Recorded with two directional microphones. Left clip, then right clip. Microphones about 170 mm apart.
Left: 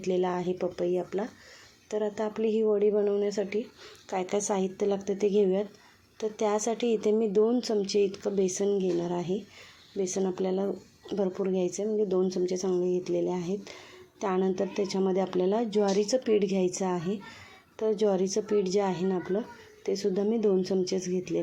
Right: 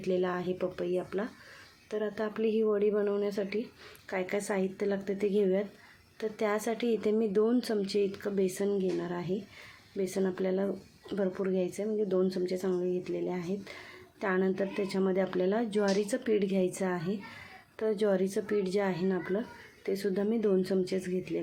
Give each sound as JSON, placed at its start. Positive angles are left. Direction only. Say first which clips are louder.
{"t": 0.0, "sound": "a woman's voice", "louder": "left 3 dB", "side_deg": 5}
{"t": 11.4, "sound": "speech", "louder": "left 2 dB", "side_deg": 15}
{"t": 11.8, "sound": "a woman's voice", "louder": "left 3 dB", "side_deg": 0}
{"t": 14.2, "sound": "a woman's voice", "louder": "left 2 dB", "side_deg": 5}